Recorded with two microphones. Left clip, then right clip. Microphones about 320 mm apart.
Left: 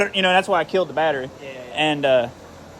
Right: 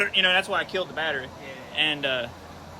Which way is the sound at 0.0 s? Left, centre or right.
Left.